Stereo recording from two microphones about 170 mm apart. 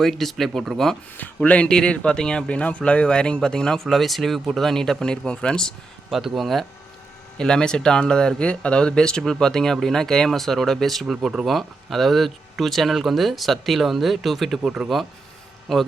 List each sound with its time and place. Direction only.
0.0 s speech: centre (ahead or behind)